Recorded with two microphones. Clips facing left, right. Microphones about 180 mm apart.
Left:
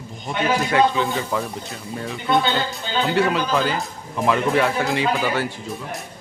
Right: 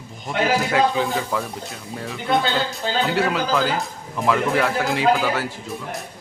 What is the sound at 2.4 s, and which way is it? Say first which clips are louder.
Speech: right 1 dB; 85° right.